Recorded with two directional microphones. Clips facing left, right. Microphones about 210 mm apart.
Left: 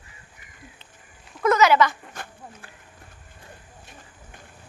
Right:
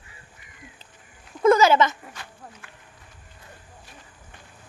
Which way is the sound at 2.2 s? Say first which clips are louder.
Left 4 dB; 50° left (ahead or behind).